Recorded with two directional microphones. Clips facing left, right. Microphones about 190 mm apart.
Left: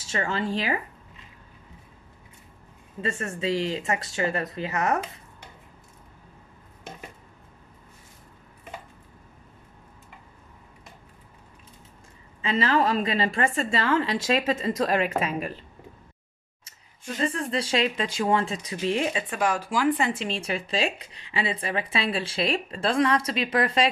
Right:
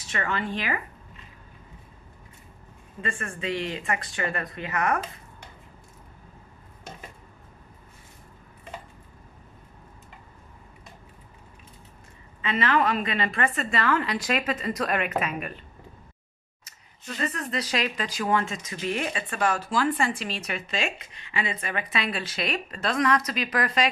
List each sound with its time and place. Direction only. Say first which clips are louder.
0.0 s speech: left 2 dB; 25° left (ahead or behind)
3.0 s speech: left 3 dB; 25° left (ahead or behind)
12.4 s speech: left 1 dB; 30° left (ahead or behind)
17.2 s speech: left 3 dB; 30° left (ahead or behind)
19.0 s speech: left 1 dB; 15° left (ahead or behind)